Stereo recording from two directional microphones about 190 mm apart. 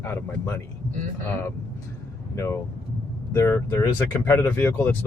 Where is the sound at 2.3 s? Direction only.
15° left (ahead or behind).